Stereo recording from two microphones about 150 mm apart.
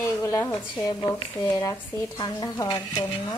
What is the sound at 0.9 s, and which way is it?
A woman's voice, 30° left (ahead or behind).